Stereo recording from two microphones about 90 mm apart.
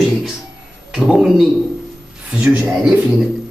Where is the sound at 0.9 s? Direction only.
5° right (ahead or behind).